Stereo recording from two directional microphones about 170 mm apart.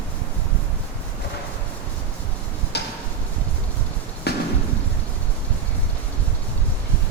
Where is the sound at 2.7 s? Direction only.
75° left (ahead or behind).